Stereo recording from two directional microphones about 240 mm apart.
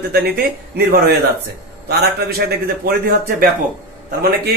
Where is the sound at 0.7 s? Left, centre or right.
Right.